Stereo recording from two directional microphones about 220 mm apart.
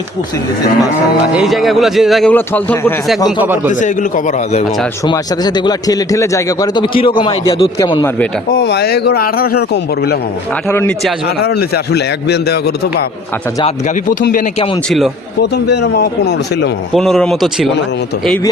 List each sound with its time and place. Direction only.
1.3 s a man's voice: centre (ahead or behind)
3.4 s a man's voice: 10° right (ahead or behind)
3.7 s a man's voice: 35° left (ahead or behind)
5.0 s a man's voice: 20° left (ahead or behind)
8.5 s a man's voice: 50° left (ahead or behind)
10.7 s speech: 10° left (ahead or behind)
11.4 s a man's voice: 50° left (ahead or behind)
13.7 s a man's voice: 35° left (ahead or behind)
14.8 s a man's voice: centre (ahead or behind)
15.4 s a man's voice: 50° left (ahead or behind)
16.9 s a man's voice: centre (ahead or behind)